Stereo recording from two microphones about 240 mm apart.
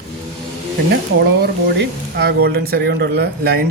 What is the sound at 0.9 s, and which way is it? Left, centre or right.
Speech, right.